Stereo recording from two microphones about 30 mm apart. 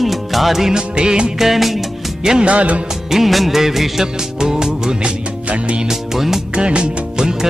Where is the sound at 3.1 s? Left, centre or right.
Centre.